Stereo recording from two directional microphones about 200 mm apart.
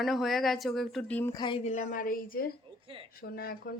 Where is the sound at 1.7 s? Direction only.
40° left (ahead or behind).